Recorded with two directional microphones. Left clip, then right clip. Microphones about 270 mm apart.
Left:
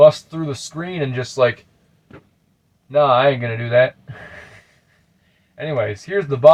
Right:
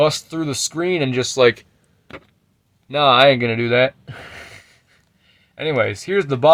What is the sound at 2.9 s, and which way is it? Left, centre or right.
Speech, right.